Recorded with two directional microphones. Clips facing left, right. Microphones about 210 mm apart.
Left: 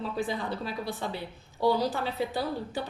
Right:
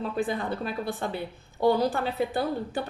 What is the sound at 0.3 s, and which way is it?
A woman's voice, 55° right (ahead or behind).